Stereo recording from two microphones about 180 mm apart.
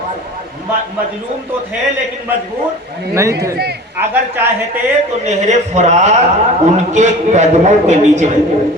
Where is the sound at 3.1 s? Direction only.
15° right (ahead or behind).